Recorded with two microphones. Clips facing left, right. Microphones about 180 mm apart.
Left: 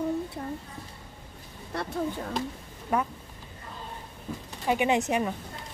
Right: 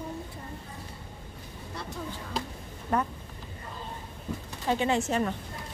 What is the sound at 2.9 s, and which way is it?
Speech, 10° left (ahead or behind).